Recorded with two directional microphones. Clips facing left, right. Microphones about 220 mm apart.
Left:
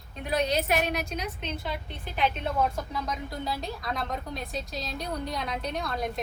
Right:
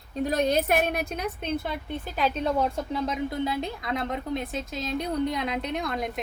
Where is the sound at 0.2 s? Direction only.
45° right (ahead or behind).